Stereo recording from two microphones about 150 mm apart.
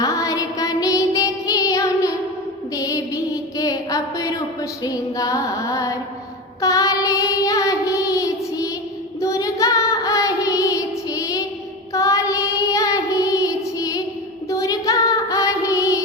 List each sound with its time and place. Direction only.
0.0 s music: 20° left (ahead or behind)
3.6 s a sound: 25° left (ahead or behind)
4.8 s female singing: 25° left (ahead or behind)
6.6 s child singing: 20° left (ahead or behind)
9.2 s female singing: 20° left (ahead or behind)
11.9 s child singing: 20° left (ahead or behind)